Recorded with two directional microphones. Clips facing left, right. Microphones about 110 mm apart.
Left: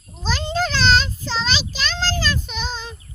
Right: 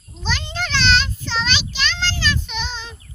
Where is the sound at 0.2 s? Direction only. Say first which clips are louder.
Left 4 dB; 40° left (ahead or behind).